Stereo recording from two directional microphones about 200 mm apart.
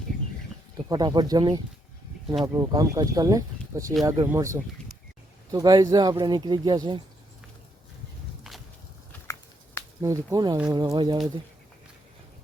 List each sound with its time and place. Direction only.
0.9 s speech: 20° right (ahead or behind)
10.0 s speech: 15° right (ahead or behind)